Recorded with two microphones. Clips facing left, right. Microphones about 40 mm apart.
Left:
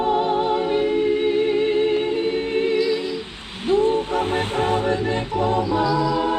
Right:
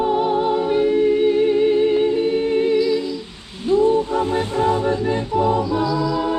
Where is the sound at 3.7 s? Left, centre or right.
Left.